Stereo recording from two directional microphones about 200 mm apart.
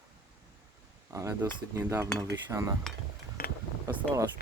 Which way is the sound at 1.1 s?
15° right (ahead or behind).